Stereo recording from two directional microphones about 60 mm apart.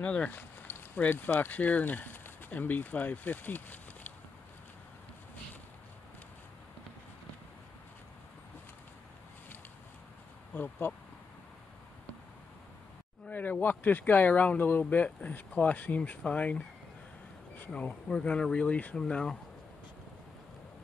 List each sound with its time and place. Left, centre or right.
0.0 s speech: left
10.5 s speech: left
13.3 s speech: left
17.7 s speech: centre